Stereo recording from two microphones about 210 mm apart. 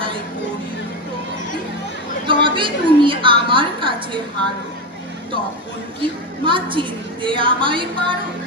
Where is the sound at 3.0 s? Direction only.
25° right (ahead or behind).